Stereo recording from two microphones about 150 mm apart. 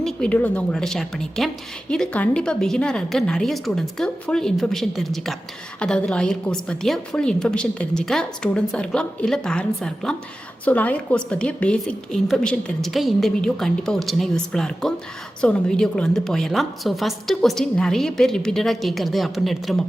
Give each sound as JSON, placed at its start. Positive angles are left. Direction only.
{"t": 0.0, "sound": "a woman's voice", "side_deg": 5}